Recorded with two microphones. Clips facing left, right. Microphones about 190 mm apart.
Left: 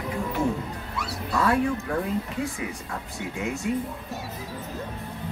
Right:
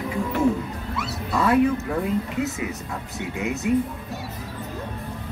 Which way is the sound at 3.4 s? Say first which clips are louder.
Right 3 dB; 20° right (ahead or behind).